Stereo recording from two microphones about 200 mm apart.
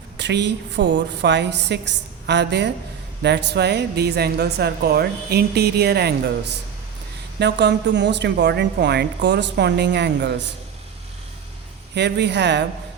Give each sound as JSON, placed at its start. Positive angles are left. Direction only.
{"t": 0.2, "sound": "a woman's voice", "side_deg": -60}
{"t": 7.3, "sound": "a woman's voice", "side_deg": -60}
{"t": 11.9, "sound": "a woman's voice", "side_deg": -60}